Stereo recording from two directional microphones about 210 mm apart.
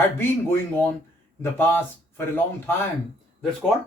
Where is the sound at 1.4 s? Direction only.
10° left (ahead or behind).